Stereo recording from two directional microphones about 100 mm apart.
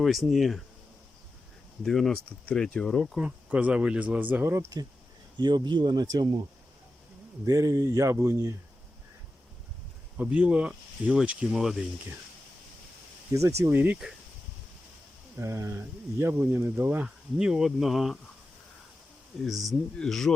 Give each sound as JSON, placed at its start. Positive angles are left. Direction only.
{"t": 0.0, "sound": "speech", "side_deg": 0}
{"t": 1.8, "sound": "speech", "side_deg": 5}
{"t": 3.2, "sound": "speech", "side_deg": -10}
{"t": 5.4, "sound": "speech", "side_deg": -50}
{"t": 7.4, "sound": "speech", "side_deg": -35}
{"t": 10.2, "sound": "speech", "side_deg": -10}
{"t": 13.3, "sound": "speech", "side_deg": -30}
{"t": 13.7, "sound": "speech", "side_deg": -15}
{"t": 15.4, "sound": "speech", "side_deg": -30}
{"t": 17.3, "sound": "speech", "side_deg": -5}
{"t": 19.5, "sound": "speech", "side_deg": 0}